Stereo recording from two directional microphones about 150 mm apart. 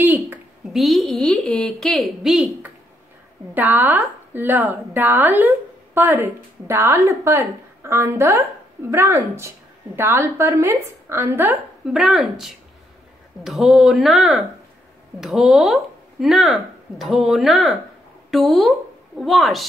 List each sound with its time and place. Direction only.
0.7 s speech: centre (ahead or behind)
3.5 s a woman's voice: 10° right (ahead or behind)
11.8 s a woman's voice: centre (ahead or behind)